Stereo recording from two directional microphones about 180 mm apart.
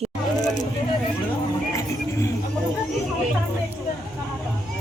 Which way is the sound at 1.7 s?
15° left (ahead or behind).